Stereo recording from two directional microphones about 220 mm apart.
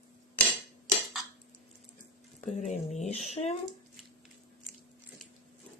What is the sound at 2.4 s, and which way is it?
Speech, 35° left (ahead or behind).